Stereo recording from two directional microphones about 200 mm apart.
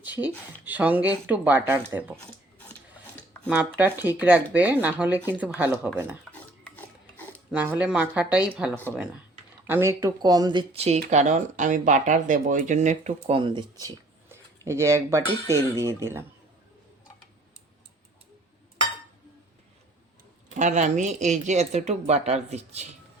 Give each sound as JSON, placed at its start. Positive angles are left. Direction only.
{"t": 0.0, "sound": "speech", "side_deg": -10}
{"t": 2.6, "sound": "a sound", "side_deg": 5}
{"t": 3.5, "sound": "speech", "side_deg": -10}
{"t": 6.3, "sound": "pig", "side_deg": 10}
{"t": 7.5, "sound": "speech", "side_deg": -10}
{"t": 20.6, "sound": "speech", "side_deg": -35}